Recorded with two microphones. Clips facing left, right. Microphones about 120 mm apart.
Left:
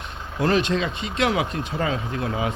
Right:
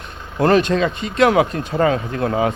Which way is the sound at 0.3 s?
45° right (ahead or behind).